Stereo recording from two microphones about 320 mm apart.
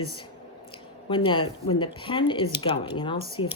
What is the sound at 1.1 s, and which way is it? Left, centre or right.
Speech, centre.